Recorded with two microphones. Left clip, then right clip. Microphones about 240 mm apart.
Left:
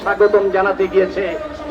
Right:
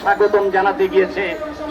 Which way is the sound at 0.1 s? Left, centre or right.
Right.